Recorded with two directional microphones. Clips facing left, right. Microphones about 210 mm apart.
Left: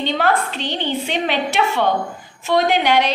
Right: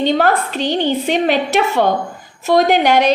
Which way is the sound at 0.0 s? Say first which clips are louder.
Right 4 dB; 45° right (ahead or behind).